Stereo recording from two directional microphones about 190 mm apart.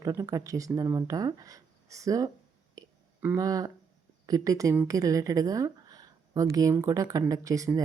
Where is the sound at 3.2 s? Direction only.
20° right (ahead or behind).